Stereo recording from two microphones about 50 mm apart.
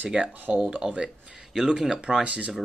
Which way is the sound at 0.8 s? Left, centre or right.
Right.